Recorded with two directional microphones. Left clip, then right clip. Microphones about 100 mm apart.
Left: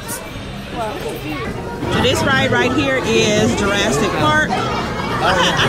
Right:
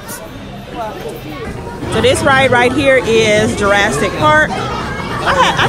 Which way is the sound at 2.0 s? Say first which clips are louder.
Right 6 dB; 25° left (ahead or behind).